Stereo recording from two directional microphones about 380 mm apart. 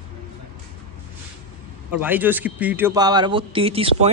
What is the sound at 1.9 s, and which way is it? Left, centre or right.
Speech, centre.